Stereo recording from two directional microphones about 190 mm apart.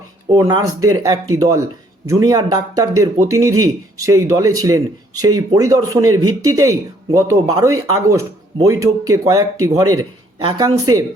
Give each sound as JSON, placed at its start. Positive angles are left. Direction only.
{"t": 0.3, "sound": "a man's voice", "side_deg": -20}